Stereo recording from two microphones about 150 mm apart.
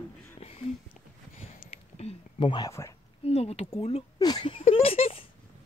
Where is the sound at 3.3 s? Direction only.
40° left (ahead or behind).